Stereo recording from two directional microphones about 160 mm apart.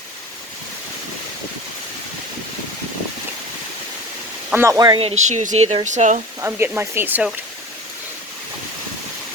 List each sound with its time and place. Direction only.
4.4 s speech: 15° right (ahead or behind)
4.9 s speech: 45° right (ahead or behind)
6.4 s speech: 15° right (ahead or behind)